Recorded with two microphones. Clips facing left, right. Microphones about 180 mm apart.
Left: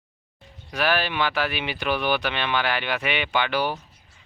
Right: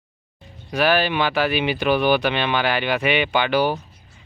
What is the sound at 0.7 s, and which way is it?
Speech, 5° right (ahead or behind).